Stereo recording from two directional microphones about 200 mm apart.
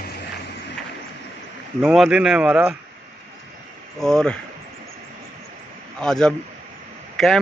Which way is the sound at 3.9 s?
Centre (ahead or behind).